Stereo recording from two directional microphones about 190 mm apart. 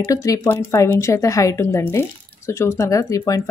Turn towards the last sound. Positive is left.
turn(degrees=15)  # may be behind; listen again after turning